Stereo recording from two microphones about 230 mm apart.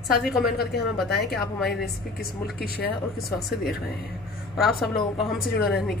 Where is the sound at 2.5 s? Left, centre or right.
Left.